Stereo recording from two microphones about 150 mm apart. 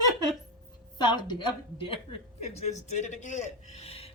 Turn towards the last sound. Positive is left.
turn(degrees=40)  # may be behind; listen again after turning